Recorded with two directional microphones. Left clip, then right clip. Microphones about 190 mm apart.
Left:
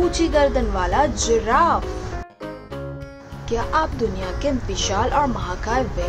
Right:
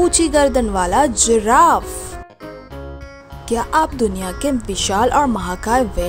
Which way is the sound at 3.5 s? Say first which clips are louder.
Right 4 dB; 65° right (ahead or behind).